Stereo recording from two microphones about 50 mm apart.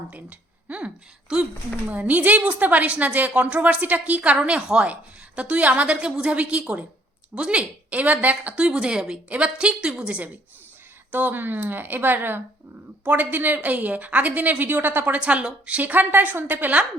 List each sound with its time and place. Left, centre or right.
0.1 s speech: right
1.3 s a woman's voice: centre
1.9 s a woman's voice: right
11.1 s a woman's voice: right
15.2 s a woman's voice: right
15.8 s a woman's voice: right